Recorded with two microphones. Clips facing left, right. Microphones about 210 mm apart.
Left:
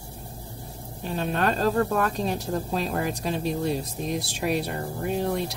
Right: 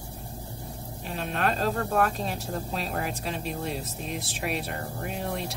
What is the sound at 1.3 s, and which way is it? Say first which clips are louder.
Speech: left 4 dB; 40° left (ahead or behind).